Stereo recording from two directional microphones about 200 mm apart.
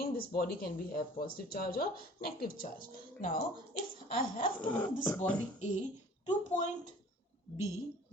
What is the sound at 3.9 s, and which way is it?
Speech, 45° left (ahead or behind).